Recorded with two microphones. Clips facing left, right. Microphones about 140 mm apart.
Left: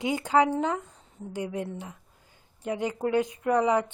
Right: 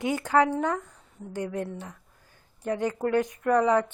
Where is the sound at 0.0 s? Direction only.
15° left (ahead or behind).